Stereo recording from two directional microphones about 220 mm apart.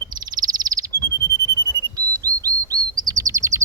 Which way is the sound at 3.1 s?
15° right (ahead or behind).